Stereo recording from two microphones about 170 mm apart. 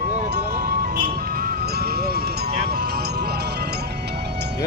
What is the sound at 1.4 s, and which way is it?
Music, 65° right (ahead or behind).